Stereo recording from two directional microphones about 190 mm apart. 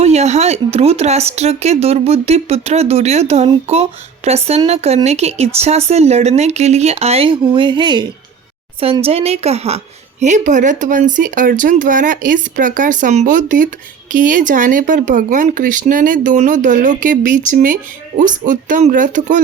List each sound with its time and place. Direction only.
0.0 s a woman's voice: 35° right (ahead or behind)